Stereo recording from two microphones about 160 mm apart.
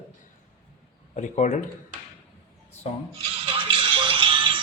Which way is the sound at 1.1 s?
50° left (ahead or behind).